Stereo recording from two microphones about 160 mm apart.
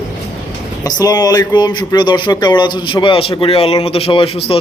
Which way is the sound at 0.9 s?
25° left (ahead or behind).